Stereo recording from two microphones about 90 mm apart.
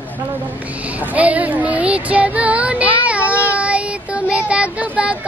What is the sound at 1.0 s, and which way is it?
Child singing, 15° right (ahead or behind).